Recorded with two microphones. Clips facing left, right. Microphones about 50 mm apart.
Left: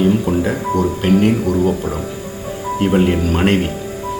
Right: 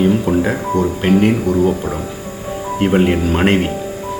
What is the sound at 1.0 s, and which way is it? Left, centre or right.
Speech, centre.